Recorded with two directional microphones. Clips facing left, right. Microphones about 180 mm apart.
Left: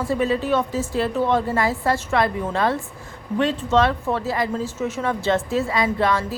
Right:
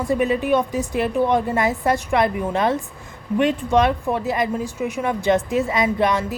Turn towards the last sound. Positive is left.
turn(degrees=-20)  # may be behind; listen again after turning